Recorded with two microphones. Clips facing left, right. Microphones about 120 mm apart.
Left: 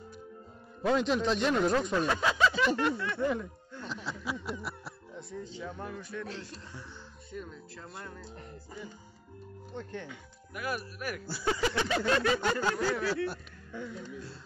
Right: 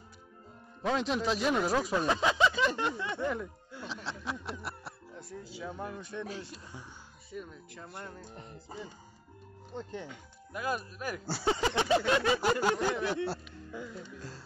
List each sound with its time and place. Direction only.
0.8 s speech: centre (ahead or behind)
2.0 s speech: 20° right (ahead or behind)
3.7 s speech: 5° right (ahead or behind)
9.8 s speech: 15° right (ahead or behind)
13.7 s speech: 10° right (ahead or behind)